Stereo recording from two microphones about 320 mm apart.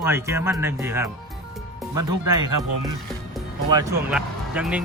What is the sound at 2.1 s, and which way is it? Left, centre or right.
Speech, centre.